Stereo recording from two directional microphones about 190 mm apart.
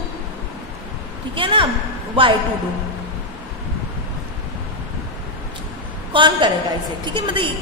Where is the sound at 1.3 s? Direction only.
25° right (ahead or behind).